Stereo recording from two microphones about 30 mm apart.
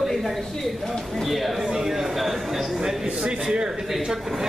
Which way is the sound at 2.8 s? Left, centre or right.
Centre.